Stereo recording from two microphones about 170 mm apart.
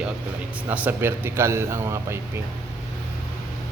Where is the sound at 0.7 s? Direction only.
10° right (ahead or behind).